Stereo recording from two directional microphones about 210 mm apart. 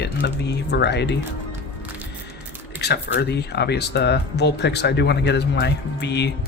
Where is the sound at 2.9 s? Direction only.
50° left (ahead or behind).